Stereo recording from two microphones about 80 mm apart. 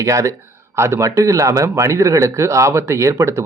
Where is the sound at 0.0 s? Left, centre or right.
Right.